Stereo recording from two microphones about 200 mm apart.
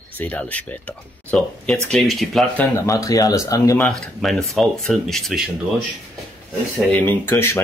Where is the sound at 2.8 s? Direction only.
15° left (ahead or behind).